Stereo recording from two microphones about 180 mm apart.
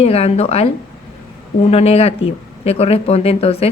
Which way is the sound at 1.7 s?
35° left (ahead or behind).